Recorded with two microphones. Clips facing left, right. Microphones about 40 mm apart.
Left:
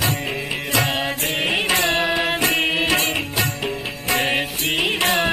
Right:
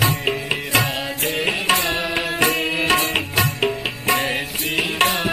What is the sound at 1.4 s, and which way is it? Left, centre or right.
Music, left.